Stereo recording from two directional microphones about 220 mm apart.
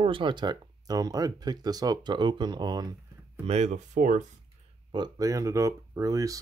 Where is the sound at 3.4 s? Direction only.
30° right (ahead or behind).